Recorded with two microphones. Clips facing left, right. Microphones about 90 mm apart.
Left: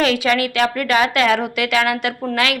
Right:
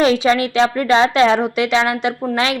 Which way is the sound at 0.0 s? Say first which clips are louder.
Right 3 dB; 25° right (ahead or behind).